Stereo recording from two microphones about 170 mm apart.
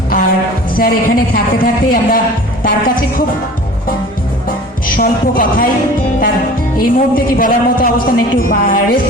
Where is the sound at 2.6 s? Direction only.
55° left (ahead or behind).